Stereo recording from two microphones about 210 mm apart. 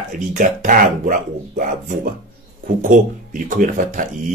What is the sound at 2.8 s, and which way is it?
Speech, 40° right (ahead or behind).